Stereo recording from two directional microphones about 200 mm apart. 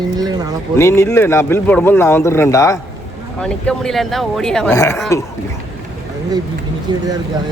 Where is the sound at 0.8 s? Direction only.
15° left (ahead or behind).